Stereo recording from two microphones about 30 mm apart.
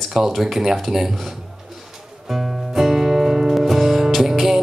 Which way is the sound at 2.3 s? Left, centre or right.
Centre.